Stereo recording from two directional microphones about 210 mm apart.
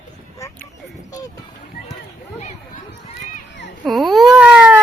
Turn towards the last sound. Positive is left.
turn(degrees=-5)  # may be behind; listen again after turning